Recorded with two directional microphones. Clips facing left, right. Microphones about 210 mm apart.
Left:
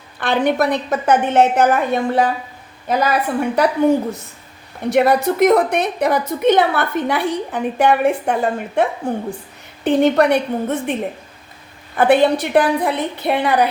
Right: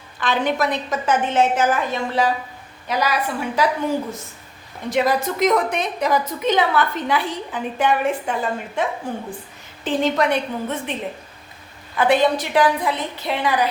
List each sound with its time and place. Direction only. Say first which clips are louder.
0.2 s a woman's voice: left 4 dB; 55° left (ahead or behind)
11.9 s a woman's voice: left 4 dB; 55° left (ahead or behind)